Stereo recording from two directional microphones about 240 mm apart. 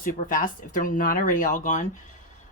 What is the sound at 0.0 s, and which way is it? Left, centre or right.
Speech, left.